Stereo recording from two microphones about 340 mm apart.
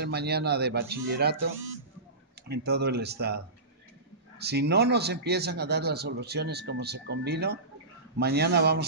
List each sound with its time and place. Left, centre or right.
0.0 s a man's voice: right
2.4 s a man's voice: right